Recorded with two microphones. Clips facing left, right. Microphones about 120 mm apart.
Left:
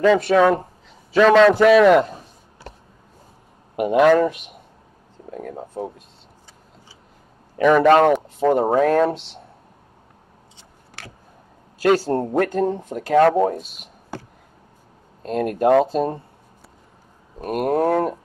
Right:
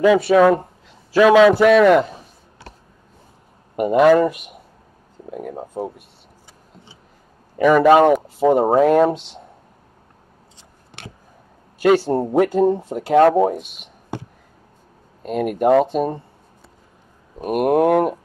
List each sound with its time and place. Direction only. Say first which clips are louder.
0.0 s speech: right 2 dB; 5° right (ahead or behind)
3.7 s speech: right 2 dB; centre (ahead or behind)
5.3 s speech: right 2 dB; 15° right (ahead or behind)
7.5 s speech: right 2 dB; centre (ahead or behind)
12.1 s speech: right 3 dB; 10° right (ahead or behind)
14.1 s a sound: right 4 dB; 20° right (ahead or behind)
15.2 s speech: right 1 dB; 5° right (ahead or behind)
17.4 s speech: right 4 dB; 15° right (ahead or behind)